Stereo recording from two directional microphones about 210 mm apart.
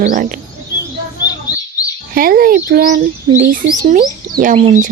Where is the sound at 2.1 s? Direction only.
45° right (ahead or behind).